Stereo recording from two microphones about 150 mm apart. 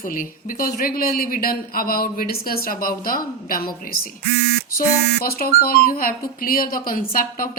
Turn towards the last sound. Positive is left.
turn(degrees=70)  # may be behind; listen again after turning